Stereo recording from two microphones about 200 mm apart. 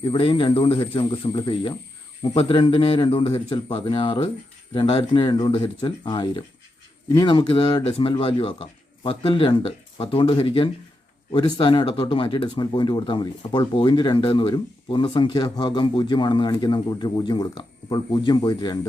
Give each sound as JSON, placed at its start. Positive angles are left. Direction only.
{"t": 0.0, "sound": "speech", "side_deg": 25}